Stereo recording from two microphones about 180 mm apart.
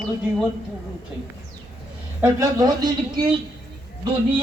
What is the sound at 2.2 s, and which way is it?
Speech, 20° right (ahead or behind).